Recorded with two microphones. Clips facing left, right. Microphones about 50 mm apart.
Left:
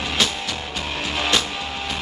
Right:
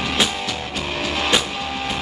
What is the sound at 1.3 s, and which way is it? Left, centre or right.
Music, centre.